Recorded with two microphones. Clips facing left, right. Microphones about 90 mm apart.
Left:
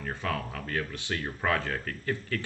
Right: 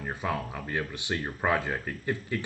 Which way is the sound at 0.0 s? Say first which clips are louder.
Right 1 dB; 15° right (ahead or behind).